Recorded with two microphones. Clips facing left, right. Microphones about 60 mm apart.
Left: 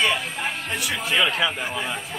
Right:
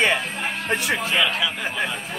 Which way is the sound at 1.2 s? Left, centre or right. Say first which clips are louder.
Left 3 dB; left.